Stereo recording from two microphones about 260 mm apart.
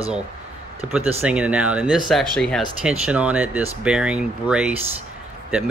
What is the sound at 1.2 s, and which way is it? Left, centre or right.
Speech, centre.